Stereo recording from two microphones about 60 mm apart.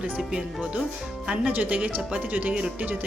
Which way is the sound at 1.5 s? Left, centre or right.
Right.